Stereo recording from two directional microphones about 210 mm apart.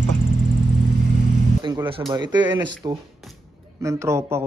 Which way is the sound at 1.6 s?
20° right (ahead or behind).